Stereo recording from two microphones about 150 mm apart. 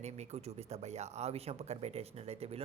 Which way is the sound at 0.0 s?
45° right (ahead or behind).